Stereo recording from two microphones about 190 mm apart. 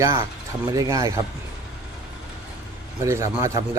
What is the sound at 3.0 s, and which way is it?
Speech, 15° right (ahead or behind).